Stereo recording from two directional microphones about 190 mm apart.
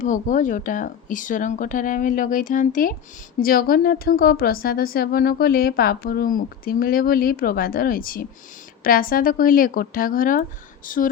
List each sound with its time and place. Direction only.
0.0 s a woman's voice: 45° left (ahead or behind)